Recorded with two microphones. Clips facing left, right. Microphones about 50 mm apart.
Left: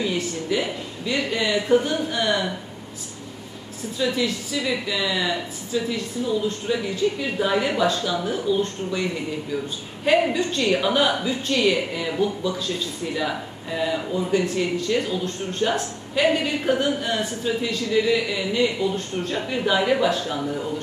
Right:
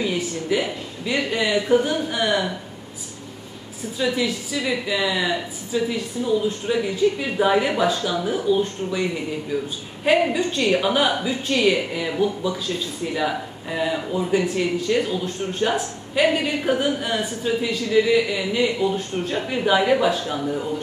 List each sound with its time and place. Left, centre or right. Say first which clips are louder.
0.0 s speech: right 1 dB; centre
4.0 s speech: right 1 dB; centre
10.0 s speech: right 1 dB; centre
13.7 s speech: right 1 dB; centre